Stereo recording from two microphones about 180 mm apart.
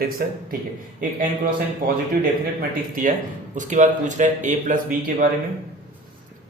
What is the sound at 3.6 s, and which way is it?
A man's voice, 45° right (ahead or behind).